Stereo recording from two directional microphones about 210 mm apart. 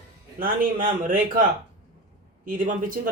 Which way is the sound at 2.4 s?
40° right (ahead or behind).